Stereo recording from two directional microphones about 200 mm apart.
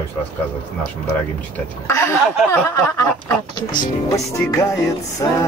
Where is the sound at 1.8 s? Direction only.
15° left (ahead or behind).